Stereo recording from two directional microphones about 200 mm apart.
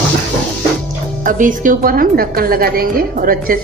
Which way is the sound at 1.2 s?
40° right (ahead or behind).